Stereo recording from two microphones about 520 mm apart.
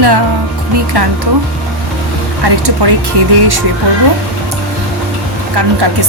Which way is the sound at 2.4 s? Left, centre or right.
Right.